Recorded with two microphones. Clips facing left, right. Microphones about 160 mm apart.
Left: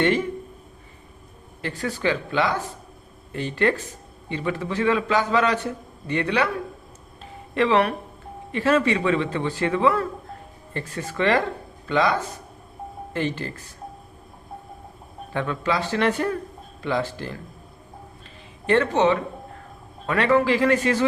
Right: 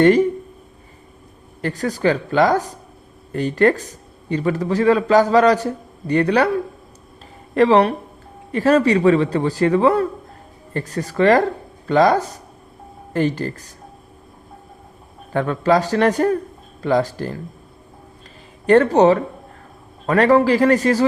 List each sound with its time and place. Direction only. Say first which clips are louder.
1.6 s a man's voice: right 6 dB; 40° right (ahead or behind)
7.5 s a man's voice: right 6 dB; 40° right (ahead or behind)
15.3 s a man's voice: right 8 dB; 45° right (ahead or behind)
18.6 s a man's voice: right 7 dB; 45° right (ahead or behind)